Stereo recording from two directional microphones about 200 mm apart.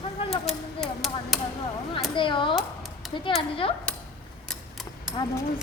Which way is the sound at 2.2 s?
25° left (ahead or behind).